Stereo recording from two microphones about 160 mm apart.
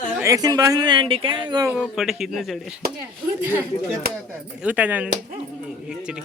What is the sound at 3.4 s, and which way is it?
Speech, 15° right (ahead or behind).